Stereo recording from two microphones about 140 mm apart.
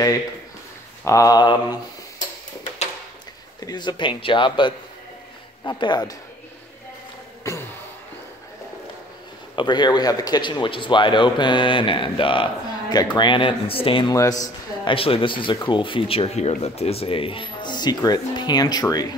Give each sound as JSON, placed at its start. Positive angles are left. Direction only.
{"t": 1.0, "sound": "mantra", "side_deg": 25}
{"t": 3.6, "sound": "speech", "side_deg": 30}
{"t": 7.5, "sound": "a sound", "side_deg": 20}
{"t": 9.6, "sound": "speech", "side_deg": 30}